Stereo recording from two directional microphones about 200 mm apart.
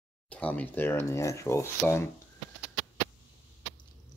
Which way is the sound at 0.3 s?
5° left (ahead or behind).